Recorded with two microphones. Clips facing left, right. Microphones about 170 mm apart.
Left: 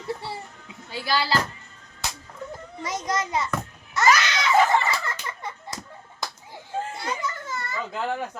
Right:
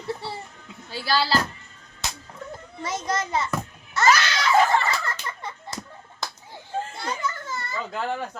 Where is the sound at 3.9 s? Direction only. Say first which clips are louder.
Even; 15° left (ahead or behind).